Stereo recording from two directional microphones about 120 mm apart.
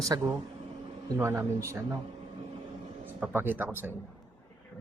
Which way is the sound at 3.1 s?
15° right (ahead or behind).